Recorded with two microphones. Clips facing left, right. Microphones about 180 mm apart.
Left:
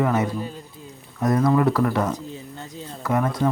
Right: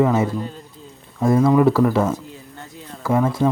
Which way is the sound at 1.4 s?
15° right (ahead or behind).